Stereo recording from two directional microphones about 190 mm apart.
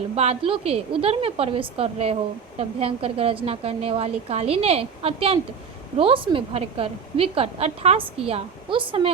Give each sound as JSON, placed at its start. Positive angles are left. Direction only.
{"t": 0.2, "sound": "a woman's voice", "side_deg": -30}